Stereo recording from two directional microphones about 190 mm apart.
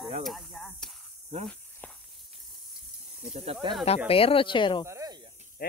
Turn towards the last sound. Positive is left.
turn(degrees=-15)  # may be behind; listen again after turning